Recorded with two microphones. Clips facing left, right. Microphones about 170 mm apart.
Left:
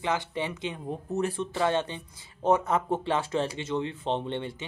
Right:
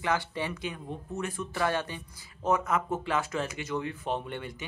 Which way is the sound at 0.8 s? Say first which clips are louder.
Left 10 dB; 35° left (ahead or behind).